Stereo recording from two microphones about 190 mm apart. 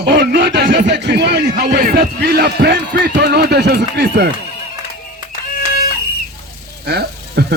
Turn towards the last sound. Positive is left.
turn(degrees=-60)  # may be behind; listen again after turning